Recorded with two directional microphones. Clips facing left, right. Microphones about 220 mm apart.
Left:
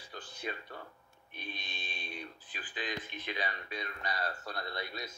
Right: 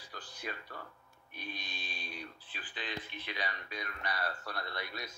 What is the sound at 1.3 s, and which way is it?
Speech, 25° left (ahead or behind).